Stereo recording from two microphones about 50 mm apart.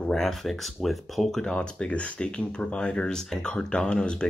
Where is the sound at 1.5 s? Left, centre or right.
Left.